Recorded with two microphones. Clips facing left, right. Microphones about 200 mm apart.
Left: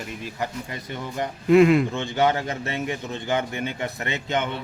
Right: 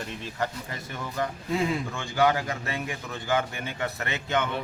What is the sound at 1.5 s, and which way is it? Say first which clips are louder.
Speech: left 14 dB; 70° left (ahead or behind).